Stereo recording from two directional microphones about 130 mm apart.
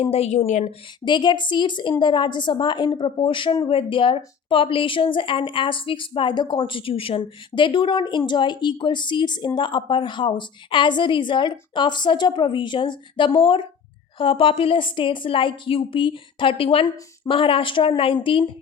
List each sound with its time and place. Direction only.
0.0 s a woman's voice: 50° left (ahead or behind); by 0.7 s 70° left (ahead or behind)
1.0 s a woman's voice: 35° left (ahead or behind)